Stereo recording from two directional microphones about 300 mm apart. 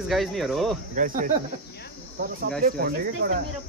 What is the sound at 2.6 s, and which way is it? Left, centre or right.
Speech, right.